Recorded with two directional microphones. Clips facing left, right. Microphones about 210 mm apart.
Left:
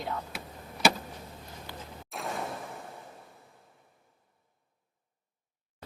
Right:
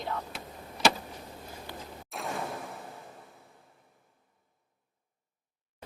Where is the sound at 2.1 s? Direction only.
Centre (ahead or behind).